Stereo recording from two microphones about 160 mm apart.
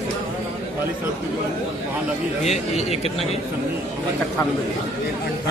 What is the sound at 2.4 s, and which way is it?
Speech, 40° left (ahead or behind).